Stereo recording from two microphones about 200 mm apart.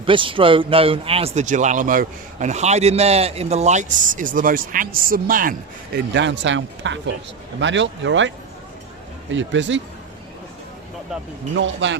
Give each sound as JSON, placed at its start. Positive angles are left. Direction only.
{"t": 0.0, "sound": "speech", "side_deg": -25}
{"t": 6.1, "sound": "speech", "side_deg": -65}
{"t": 9.3, "sound": "speech", "side_deg": -65}
{"t": 11.5, "sound": "speech", "side_deg": -65}